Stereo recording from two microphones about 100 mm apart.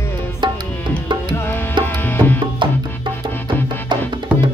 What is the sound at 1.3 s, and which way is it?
Music, 25° left (ahead or behind).